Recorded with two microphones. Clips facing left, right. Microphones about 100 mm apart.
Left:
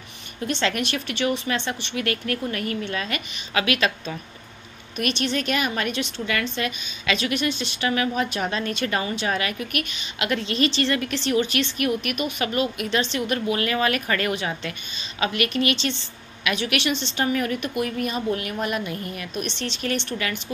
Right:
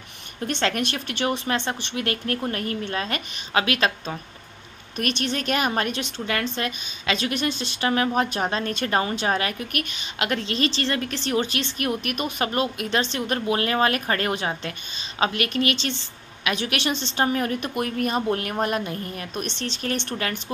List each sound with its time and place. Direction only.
0.5 s a woman's voice: 45° right (ahead or behind)